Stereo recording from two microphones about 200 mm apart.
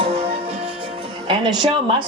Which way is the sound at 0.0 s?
30° right (ahead or behind).